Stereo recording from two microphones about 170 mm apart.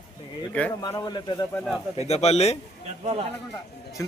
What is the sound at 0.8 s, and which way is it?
Speech, 25° left (ahead or behind).